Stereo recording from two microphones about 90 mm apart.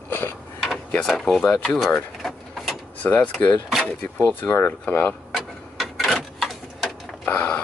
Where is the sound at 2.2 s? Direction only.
5° left (ahead or behind).